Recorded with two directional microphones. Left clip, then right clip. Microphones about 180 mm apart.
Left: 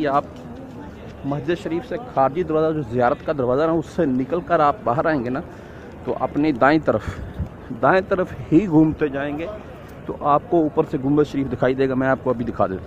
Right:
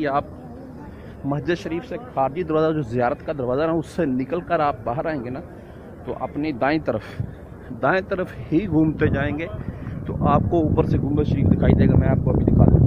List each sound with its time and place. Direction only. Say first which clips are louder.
0.0 s speech: left 2 dB; 15° left (ahead or behind)
1.3 s speech: even; 5° left (ahead or behind)
1.7 s speech: left 3 dB; 20° left (ahead or behind)
2.4 s speech: even; 5° left (ahead or behind)
3.0 s speech: left 6 dB; 20° left (ahead or behind)
8.9 s speech: even; centre (ahead or behind)
10.0 s speech: left 2 dB; 15° left (ahead or behind)
11.1 s speech: left 4 dB; 35° left (ahead or behind)